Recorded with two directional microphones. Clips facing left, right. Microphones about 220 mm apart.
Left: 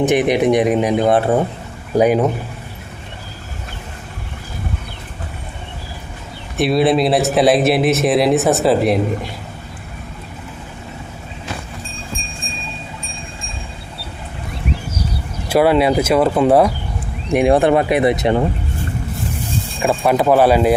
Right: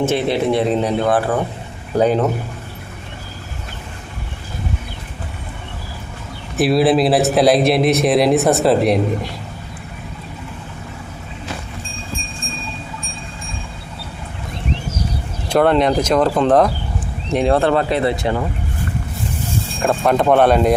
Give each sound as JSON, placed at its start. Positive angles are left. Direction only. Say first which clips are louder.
{"t": 0.0, "sound": "speech", "louder": "left 3 dB", "side_deg": 15}
{"t": 2.0, "sound": "speech", "louder": "left 2 dB", "side_deg": 10}
{"t": 6.6, "sound": "speech", "louder": "right 1 dB", "side_deg": 0}
{"t": 15.4, "sound": "speech", "louder": "left 1 dB", "side_deg": 5}
{"t": 19.8, "sound": "speech", "louder": "left 1 dB", "side_deg": 5}